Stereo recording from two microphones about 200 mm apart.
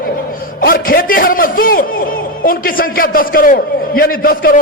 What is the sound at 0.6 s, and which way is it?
A man's voice, 45° left (ahead or behind).